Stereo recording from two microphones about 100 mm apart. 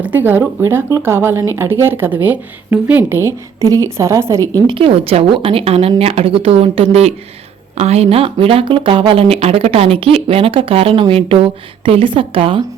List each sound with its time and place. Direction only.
0.0 s speech: 20° right (ahead or behind)
4.6 s a woman's voice: 60° right (ahead or behind)